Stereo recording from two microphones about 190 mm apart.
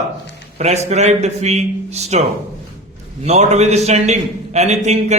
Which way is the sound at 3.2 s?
35° right (ahead or behind).